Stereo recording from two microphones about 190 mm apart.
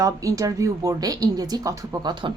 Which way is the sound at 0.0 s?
15° right (ahead or behind).